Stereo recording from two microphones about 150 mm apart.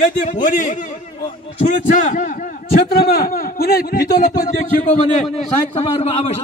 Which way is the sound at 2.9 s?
85° left.